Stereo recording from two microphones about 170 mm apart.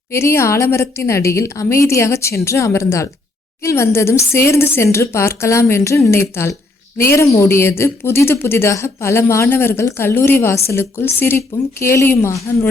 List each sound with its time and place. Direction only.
0.1 s speech: 15° left (ahead or behind)